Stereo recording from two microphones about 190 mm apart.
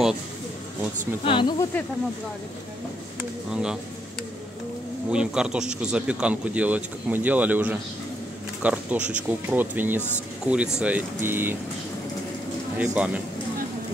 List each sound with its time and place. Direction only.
1.2 s speech: 25° left (ahead or behind)
3.2 s speech: 5° right (ahead or behind)
5.1 s speech: 5° right (ahead or behind)
12.7 s speech: 5° right (ahead or behind)